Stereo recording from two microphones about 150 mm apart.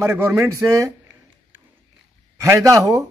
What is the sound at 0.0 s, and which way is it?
Speech, 15° right (ahead or behind).